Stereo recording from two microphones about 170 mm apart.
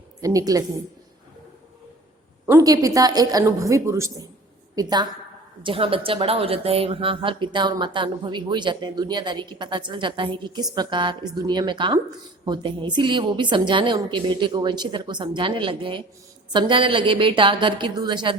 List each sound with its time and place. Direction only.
0.2 s a woman's voice: 20° right (ahead or behind)
2.5 s a woman's voice: 20° right (ahead or behind)